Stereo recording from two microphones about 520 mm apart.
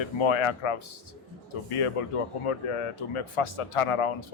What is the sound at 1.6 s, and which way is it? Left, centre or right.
A man's voice, left.